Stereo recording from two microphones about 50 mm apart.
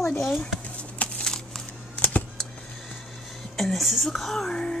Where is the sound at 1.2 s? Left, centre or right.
Centre.